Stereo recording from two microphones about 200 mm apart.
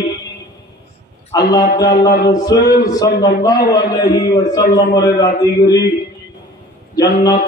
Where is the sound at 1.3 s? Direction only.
20° left (ahead or behind).